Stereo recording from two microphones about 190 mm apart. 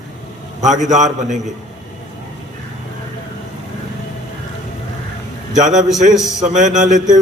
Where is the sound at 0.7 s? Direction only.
40° right (ahead or behind).